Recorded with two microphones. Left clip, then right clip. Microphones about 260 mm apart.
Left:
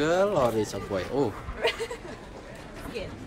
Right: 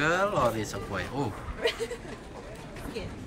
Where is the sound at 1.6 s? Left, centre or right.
Left.